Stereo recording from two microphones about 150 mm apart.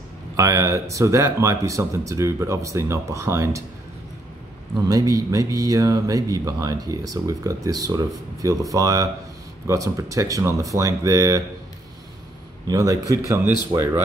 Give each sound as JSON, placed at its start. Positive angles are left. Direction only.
{"t": 0.4, "sound": "speech", "side_deg": -20}
{"t": 4.8, "sound": "speech", "side_deg": -25}
{"t": 12.6, "sound": "speech", "side_deg": -25}